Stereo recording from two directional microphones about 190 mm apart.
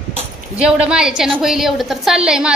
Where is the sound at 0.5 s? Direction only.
5° right (ahead or behind).